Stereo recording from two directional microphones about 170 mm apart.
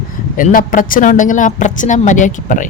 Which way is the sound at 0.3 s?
55° left (ahead or behind).